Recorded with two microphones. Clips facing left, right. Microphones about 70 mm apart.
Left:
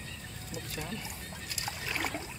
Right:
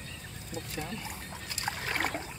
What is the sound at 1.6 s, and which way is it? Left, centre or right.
Rowboat, right.